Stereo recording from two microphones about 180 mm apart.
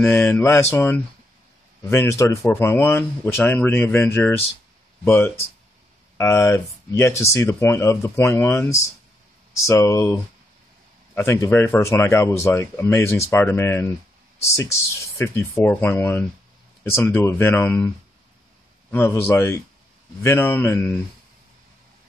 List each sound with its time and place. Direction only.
0.0 s speech: 10° left (ahead or behind)
15.1 s speech: 15° left (ahead or behind)
18.9 s speech: 10° left (ahead or behind)